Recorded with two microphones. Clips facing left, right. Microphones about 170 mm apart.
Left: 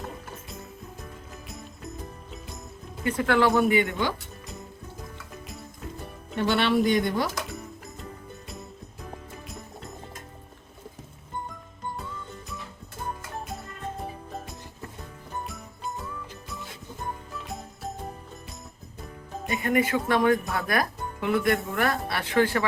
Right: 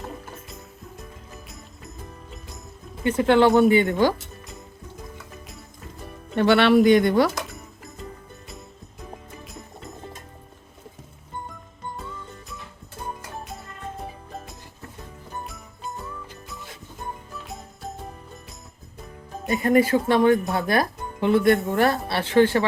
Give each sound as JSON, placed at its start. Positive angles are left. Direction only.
{"t": 3.0, "sound": "speech", "side_deg": -25}
{"t": 6.3, "sound": "speech", "side_deg": -70}
{"t": 9.5, "sound": "music", "side_deg": 0}
{"t": 14.0, "sound": "music", "side_deg": 0}
{"t": 17.3, "sound": "jingle bell", "side_deg": 0}
{"t": 19.5, "sound": "speech", "side_deg": -35}